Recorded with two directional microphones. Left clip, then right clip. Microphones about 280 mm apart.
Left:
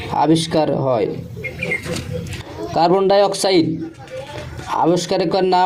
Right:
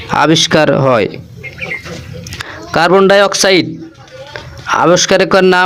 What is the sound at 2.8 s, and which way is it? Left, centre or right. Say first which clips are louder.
Speech: right 6 dB; right.